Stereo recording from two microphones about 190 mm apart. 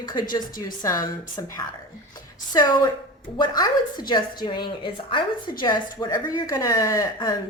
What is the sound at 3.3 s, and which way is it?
A woman's voice, 25° left (ahead or behind).